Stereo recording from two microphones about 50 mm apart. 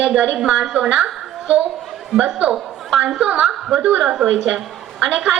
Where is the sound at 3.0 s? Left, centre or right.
Centre.